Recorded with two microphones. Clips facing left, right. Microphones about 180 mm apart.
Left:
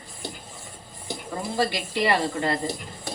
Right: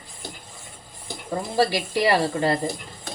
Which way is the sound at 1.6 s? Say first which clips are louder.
Right 4 dB; 35° right (ahead or behind).